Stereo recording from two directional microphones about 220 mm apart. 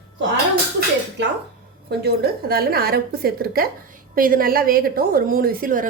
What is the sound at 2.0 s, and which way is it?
Speech, 45° right (ahead or behind).